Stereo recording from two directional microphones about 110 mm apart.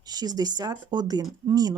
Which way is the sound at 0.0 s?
35° right (ahead or behind).